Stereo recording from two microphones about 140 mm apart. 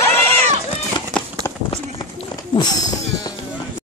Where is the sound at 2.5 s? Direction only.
30° left (ahead or behind).